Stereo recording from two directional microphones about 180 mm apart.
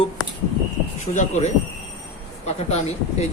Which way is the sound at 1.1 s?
40° left (ahead or behind).